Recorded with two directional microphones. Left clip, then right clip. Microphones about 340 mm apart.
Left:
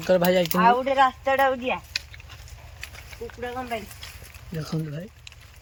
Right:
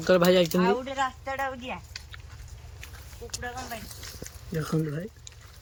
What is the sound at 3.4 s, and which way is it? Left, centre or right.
Speech, left.